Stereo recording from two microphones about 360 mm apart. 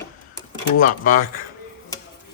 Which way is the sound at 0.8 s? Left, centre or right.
Left.